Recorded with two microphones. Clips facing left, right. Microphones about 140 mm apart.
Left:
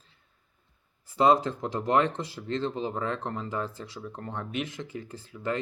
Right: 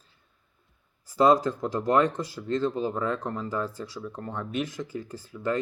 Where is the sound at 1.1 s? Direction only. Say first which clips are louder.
Right 2 dB; 25° left (ahead or behind).